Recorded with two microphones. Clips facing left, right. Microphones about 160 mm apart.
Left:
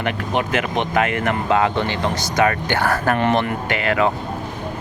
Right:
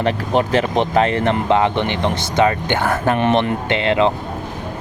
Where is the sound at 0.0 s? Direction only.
35° right (ahead or behind).